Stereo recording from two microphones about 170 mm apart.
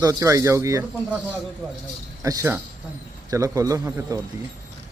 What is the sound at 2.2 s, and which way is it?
Speech, 15° right (ahead or behind).